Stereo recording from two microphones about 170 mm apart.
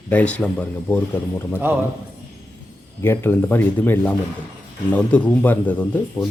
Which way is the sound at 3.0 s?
15° left (ahead or behind).